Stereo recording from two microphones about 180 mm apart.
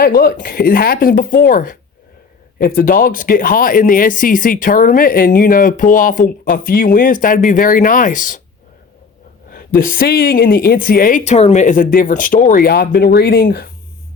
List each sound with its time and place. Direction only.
0.0 s speech: 55° left (ahead or behind)
9.5 s speech: 50° left (ahead or behind)